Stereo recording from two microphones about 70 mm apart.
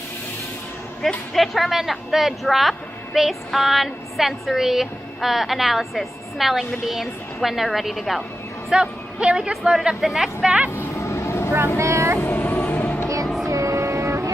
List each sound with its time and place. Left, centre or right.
1.3 s speech: centre
8.7 s speech: centre
10.7 s vehicle: left
11.0 s vehicle: left
11.8 s speech: right
12.2 s vehicle: left
13.5 s music: right